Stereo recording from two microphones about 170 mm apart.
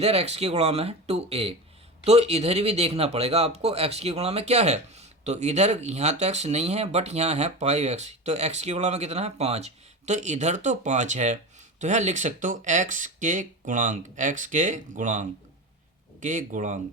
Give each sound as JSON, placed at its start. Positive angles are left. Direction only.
{"t": 0.0, "sound": "speech", "side_deg": -35}